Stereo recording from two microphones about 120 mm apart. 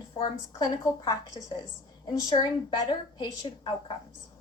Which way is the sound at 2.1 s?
35° left (ahead or behind).